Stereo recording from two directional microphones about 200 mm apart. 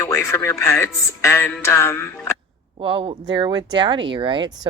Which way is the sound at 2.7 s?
25° right (ahead or behind).